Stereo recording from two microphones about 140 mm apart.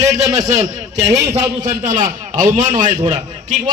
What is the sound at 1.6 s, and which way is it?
A man's voice, 60° right (ahead or behind).